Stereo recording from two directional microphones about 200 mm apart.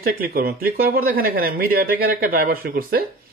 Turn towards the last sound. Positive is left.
turn(degrees=-50)  # may be behind; listen again after turning